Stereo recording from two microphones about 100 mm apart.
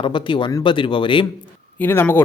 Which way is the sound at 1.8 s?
20° left (ahead or behind).